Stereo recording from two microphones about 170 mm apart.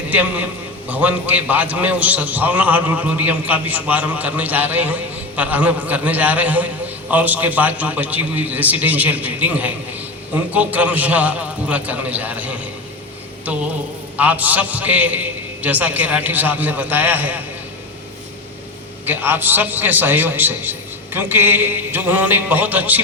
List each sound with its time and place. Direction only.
0.1 s a man's voice: 10° right (ahead or behind)
13.4 s a sound: 10° right (ahead or behind)
14.2 s a man's voice: 10° right (ahead or behind)
19.0 s a man's voice: 10° right (ahead or behind)